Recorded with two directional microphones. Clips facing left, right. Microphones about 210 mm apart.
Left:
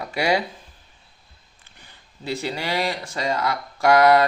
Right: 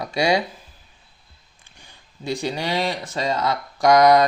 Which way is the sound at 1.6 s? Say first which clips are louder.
Right 1 dB; 15° right (ahead or behind).